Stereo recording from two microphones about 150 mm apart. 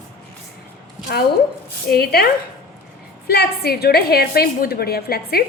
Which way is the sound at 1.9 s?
90° left.